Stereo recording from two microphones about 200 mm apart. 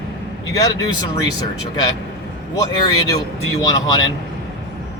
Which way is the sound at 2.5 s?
15° left (ahead or behind).